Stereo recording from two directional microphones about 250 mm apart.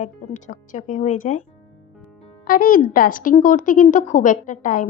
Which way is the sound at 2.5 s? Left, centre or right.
Left.